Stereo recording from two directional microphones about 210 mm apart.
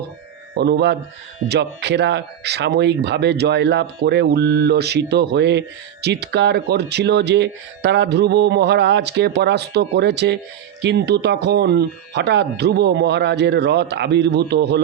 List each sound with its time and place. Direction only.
0.5 s speech: 55° right (ahead or behind)